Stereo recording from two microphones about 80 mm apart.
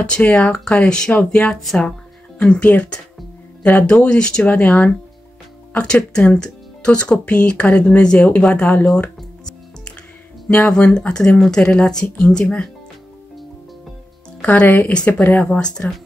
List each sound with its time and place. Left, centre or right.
0.0 s speech: centre
10.8 s speech: centre
14.4 s speech: centre